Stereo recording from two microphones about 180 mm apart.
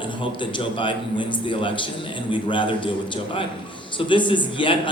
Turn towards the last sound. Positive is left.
turn(degrees=25)  # may be behind; listen again after turning